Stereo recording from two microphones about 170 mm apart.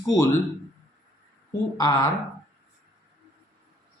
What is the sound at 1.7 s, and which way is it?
Speech, 20° left (ahead or behind).